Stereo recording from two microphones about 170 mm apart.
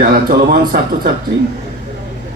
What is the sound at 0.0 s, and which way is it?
A man's voice, 60° right (ahead or behind).